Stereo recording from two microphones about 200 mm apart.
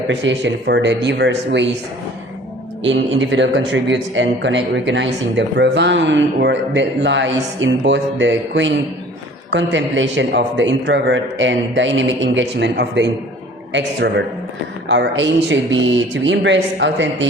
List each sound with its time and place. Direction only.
0.1 s a man's voice: 65° right (ahead or behind)
3.1 s a man's voice: 70° right (ahead or behind)